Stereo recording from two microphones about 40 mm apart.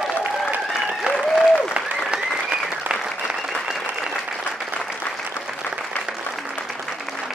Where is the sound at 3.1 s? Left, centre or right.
Centre.